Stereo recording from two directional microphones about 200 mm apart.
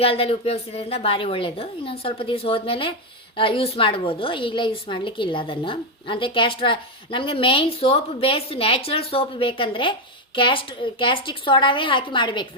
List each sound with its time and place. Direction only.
0.0 s a woman's voice: 30° left (ahead or behind)